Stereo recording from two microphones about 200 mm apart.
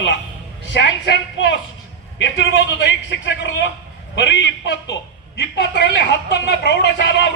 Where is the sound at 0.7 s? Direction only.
60° left (ahead or behind).